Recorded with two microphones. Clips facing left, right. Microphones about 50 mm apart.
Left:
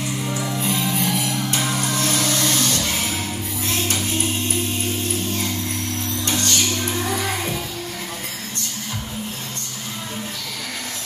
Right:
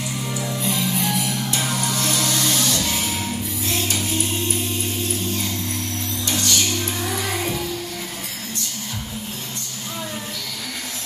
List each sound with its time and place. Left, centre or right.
0.6 s music: left
6.2 s music: left